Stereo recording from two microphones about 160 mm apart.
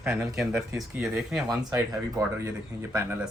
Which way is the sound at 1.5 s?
20° right (ahead or behind).